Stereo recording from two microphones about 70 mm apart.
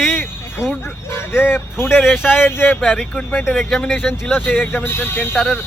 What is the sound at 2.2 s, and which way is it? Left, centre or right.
Speech, left.